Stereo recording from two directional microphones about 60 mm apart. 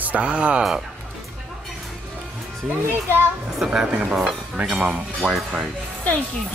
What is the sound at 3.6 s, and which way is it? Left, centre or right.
A woman's voice, centre.